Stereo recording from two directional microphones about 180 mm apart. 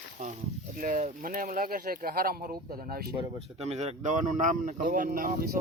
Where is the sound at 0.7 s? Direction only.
45° right (ahead or behind).